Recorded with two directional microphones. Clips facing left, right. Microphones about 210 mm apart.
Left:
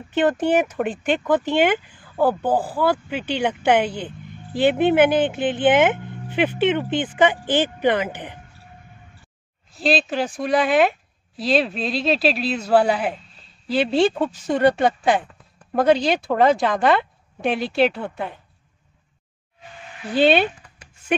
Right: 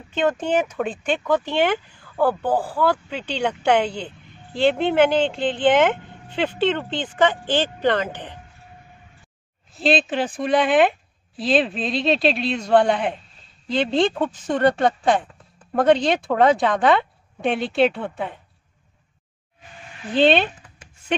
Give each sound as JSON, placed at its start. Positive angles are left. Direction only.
{"t": 0.7, "sound": "speech", "side_deg": 10}
{"t": 9.7, "sound": "speech", "side_deg": 0}
{"t": 20.2, "sound": "speech", "side_deg": 10}